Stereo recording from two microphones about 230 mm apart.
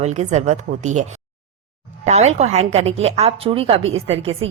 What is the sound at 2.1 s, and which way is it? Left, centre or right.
A woman's voice, right.